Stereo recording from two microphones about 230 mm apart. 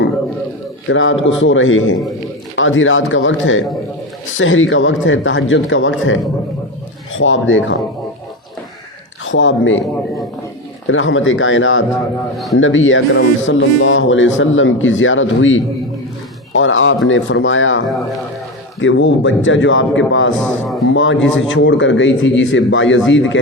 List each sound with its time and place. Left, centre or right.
0.9 s speech: left
9.2 s speech: left
10.8 s speech: left
20.4 s speech: centre
20.9 s speech: left